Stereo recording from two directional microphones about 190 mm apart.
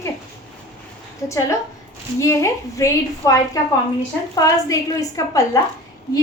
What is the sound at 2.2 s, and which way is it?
A woman's voice, 15° left (ahead or behind).